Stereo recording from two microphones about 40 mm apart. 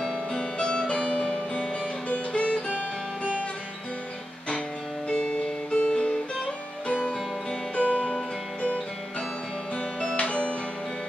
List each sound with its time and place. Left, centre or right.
0.0 s music: centre; by 2.5 s left
5.0 s music: centre
10.1 s music: left